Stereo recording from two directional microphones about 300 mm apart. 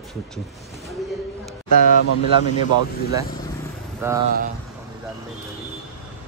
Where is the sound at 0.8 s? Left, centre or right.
Centre.